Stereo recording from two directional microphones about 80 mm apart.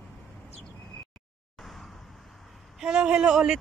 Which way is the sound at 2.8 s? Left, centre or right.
Centre.